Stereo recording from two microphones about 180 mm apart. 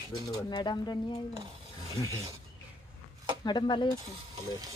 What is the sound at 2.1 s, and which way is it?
Speech, 15° right (ahead or behind).